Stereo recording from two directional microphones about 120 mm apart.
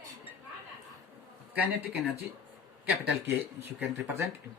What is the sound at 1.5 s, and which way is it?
Speech, 15° right (ahead or behind).